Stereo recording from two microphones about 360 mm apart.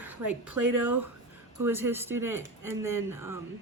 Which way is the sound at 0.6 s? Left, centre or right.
Right.